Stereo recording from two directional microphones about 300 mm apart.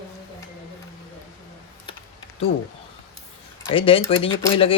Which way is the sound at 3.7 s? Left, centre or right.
Centre.